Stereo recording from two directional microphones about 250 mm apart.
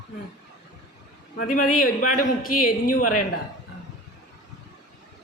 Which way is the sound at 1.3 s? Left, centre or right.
Left.